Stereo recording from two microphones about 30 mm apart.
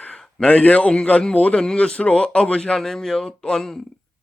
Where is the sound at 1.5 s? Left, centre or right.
Left.